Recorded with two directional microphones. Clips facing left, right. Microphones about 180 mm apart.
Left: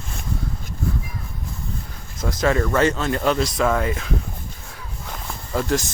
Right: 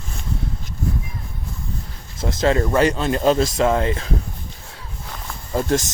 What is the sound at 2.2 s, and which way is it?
Speech, 25° right (ahead or behind).